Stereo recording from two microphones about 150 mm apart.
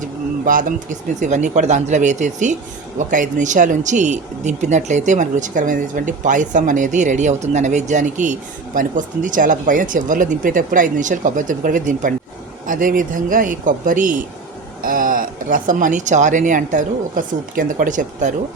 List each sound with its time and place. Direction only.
0.0 s speech: 60° right (ahead or behind)